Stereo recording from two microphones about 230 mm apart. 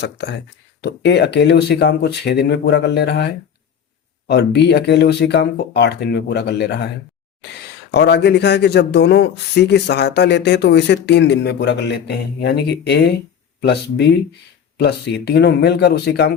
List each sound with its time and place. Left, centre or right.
0.0 s speech: left